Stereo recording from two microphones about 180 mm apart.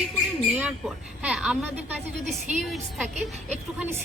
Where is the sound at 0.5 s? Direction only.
5° right (ahead or behind).